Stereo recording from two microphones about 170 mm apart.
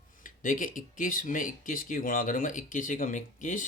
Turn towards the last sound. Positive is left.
turn(degrees=50)  # may be behind; listen again after turning